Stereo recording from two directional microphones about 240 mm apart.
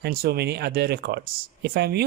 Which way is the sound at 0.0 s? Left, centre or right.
Right.